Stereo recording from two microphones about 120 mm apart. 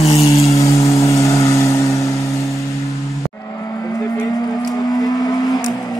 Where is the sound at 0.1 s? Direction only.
25° left (ahead or behind).